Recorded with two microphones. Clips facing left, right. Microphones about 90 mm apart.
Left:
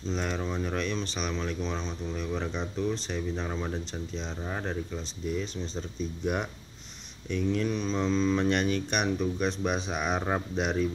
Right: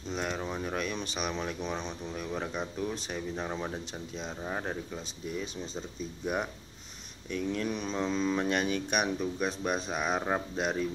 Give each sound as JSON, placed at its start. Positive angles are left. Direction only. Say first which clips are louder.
{"t": 0.1, "sound": "speech", "louder": "left 2 dB", "side_deg": -5}
{"t": 7.2, "sound": "speech", "louder": "left 4 dB", "side_deg": -5}